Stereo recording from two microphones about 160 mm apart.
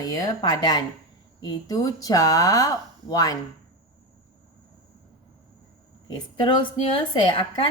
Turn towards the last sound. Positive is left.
turn(degrees=35)  # may be behind; listen again after turning